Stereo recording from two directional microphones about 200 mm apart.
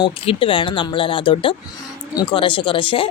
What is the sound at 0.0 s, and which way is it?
Speech, 25° left (ahead or behind).